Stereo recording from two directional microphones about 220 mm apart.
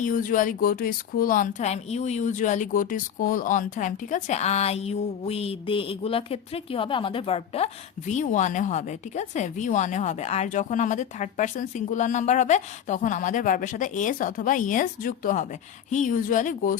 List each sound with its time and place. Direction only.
0.0 s a woman's voice: 40° left (ahead or behind)